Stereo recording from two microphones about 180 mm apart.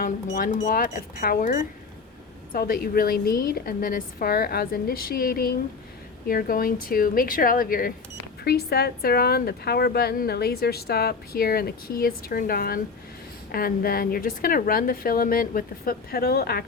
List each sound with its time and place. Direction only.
0.3 s speech: 50° left (ahead or behind)